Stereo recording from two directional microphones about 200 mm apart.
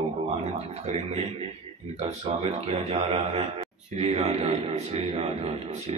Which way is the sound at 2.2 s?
30° right (ahead or behind).